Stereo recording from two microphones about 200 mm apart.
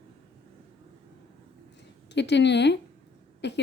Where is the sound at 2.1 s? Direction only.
60° left (ahead or behind).